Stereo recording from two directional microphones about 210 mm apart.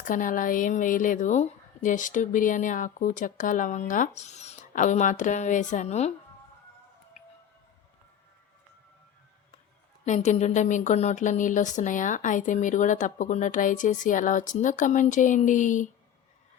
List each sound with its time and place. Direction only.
0.0 s a woman's voice: 40° left (ahead or behind)
10.1 s a woman's voice: 30° left (ahead or behind)